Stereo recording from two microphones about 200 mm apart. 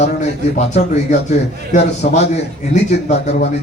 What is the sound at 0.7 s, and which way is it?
Speech, 35° left (ahead or behind).